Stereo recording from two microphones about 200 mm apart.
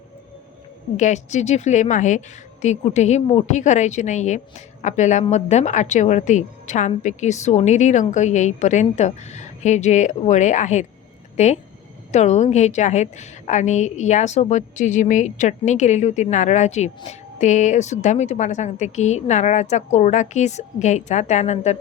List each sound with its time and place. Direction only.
0.9 s a woman's voice: 35° left (ahead or behind)